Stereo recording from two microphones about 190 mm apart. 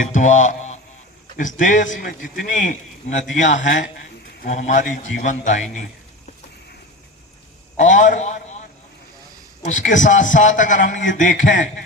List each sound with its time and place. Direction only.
0.0 s a man's voice: 40° left (ahead or behind)
7.8 s a man's voice: 40° left (ahead or behind)
9.6 s a man's voice: 40° left (ahead or behind)